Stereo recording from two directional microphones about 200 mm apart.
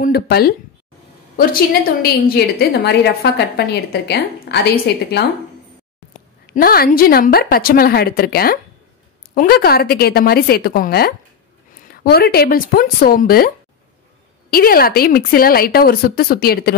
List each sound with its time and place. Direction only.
0.0 s a woman's voice: 50° left (ahead or behind)
6.4 s speech: 45° left (ahead or behind)
14.5 s speech: 45° left (ahead or behind)